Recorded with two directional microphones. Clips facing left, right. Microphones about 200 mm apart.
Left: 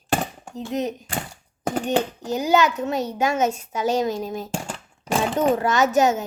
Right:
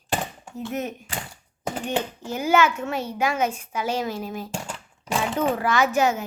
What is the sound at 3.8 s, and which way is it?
Speech, 40° left (ahead or behind).